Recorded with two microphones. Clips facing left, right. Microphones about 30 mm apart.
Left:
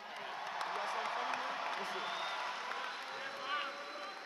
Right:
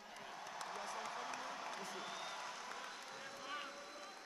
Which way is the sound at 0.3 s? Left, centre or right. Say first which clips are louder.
Left 8 dB; left.